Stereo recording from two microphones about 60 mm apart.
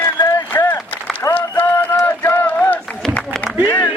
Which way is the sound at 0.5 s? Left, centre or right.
Left.